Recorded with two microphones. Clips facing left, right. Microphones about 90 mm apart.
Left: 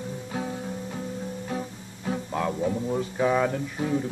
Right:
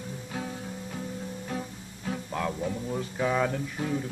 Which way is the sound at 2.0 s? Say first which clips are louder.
Left 4 dB; 15° left (ahead or behind).